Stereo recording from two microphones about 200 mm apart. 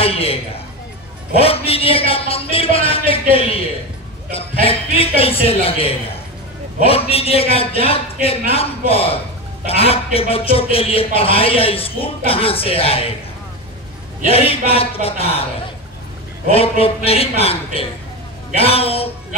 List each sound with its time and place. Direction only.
0.0 s a man's voice: 30° left (ahead or behind)
14.2 s a man's voice: 30° left (ahead or behind)
16.4 s a man's voice: 30° left (ahead or behind)
18.6 s a man's voice: 30° left (ahead or behind)